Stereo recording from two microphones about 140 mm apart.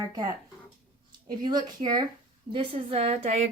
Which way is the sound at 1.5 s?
30° right (ahead or behind).